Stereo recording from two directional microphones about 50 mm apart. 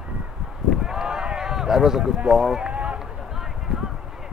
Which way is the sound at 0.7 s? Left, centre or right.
Centre.